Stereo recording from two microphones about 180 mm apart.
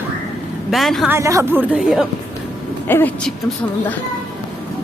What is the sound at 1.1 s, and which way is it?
Speech, 15° right (ahead or behind).